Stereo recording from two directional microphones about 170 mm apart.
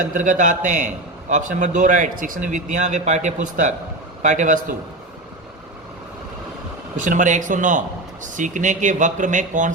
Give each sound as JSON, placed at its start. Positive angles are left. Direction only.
{"t": 0.0, "sound": "a man's voice", "side_deg": -50}
{"t": 7.0, "sound": "a man's voice", "side_deg": -50}